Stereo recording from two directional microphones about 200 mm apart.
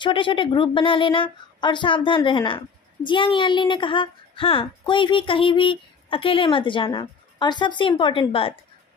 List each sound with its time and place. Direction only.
0.0 s a woman's voice: 25° left (ahead or behind)